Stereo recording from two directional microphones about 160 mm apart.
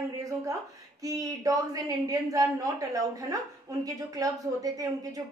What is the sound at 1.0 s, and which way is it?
A woman's voice, 20° right (ahead or behind).